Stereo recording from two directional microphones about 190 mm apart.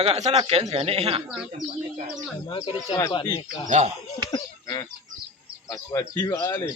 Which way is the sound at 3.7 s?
40° right (ahead or behind).